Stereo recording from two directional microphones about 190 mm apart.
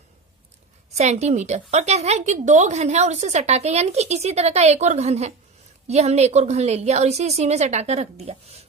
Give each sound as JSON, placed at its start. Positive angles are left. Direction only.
{"t": 0.9, "sound": "a woman's voice", "side_deg": -35}